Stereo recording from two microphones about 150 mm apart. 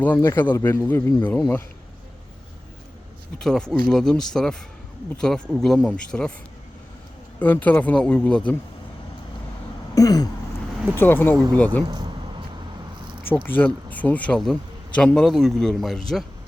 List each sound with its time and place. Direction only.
0.0 s speech: 15° left (ahead or behind)
3.3 s a man's voice: 5° left (ahead or behind)
7.3 s speech: 10° left (ahead or behind)
9.9 s a sound: 25° left (ahead or behind)
10.9 s speech: 15° left (ahead or behind)
11.9 s a sound: 30° right (ahead or behind)
13.2 s a man's voice: 15° left (ahead or behind)